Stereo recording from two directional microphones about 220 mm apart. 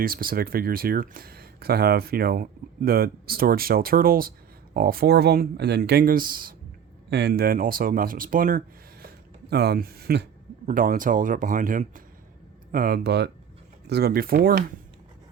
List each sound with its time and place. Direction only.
0.0 s speech: 40° right (ahead or behind)